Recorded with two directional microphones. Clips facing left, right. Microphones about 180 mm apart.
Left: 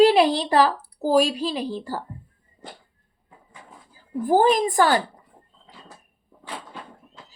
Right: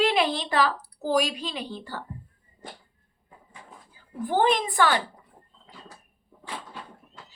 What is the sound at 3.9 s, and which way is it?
Speech, 35° left (ahead or behind).